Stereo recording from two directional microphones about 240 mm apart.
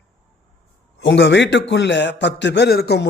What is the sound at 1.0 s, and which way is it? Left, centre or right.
A man's voice, left.